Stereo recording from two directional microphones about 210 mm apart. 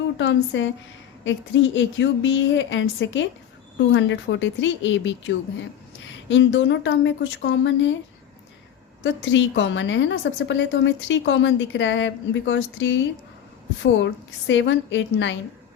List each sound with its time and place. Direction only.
0.2 s a woman's voice: 60° left (ahead or behind)
9.0 s a woman's voice: 65° left (ahead or behind)